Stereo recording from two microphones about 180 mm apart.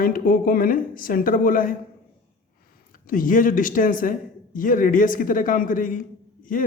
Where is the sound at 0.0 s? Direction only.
50° left (ahead or behind).